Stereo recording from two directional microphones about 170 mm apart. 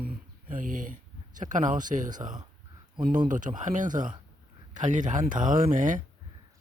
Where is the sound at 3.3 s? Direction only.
50° right (ahead or behind).